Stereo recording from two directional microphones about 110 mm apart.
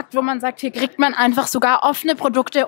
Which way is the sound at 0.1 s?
20° left (ahead or behind).